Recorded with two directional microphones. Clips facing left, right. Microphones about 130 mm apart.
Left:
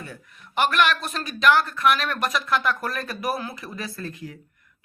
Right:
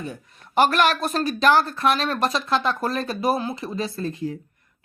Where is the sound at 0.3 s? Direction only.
35° right (ahead or behind).